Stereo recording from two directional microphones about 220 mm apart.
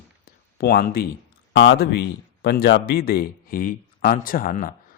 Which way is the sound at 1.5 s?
50° left (ahead or behind).